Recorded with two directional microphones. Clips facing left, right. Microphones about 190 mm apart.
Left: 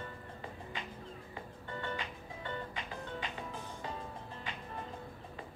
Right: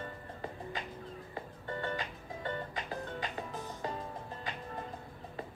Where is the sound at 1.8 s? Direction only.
40° right (ahead or behind).